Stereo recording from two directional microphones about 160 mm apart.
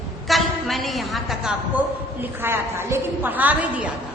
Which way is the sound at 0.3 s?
Centre (ahead or behind).